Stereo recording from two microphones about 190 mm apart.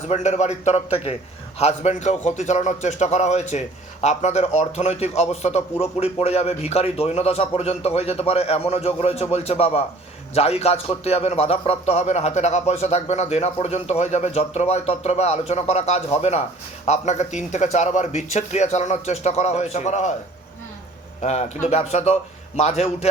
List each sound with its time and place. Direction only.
0.1 s a man's voice: 35° left (ahead or behind)
21.2 s a man's voice: 35° left (ahead or behind)